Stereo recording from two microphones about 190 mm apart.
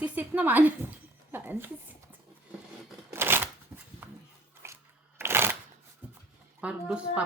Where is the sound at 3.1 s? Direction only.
10° right (ahead or behind).